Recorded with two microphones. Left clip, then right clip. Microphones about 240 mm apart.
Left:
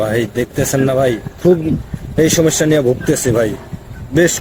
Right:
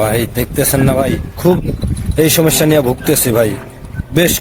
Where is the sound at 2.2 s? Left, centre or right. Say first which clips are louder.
Right 1 dB; right.